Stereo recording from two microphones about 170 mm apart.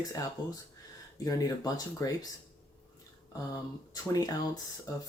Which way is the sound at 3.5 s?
20° left (ahead or behind).